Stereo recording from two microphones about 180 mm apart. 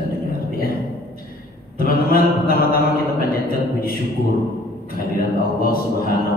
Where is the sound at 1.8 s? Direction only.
55° left (ahead or behind).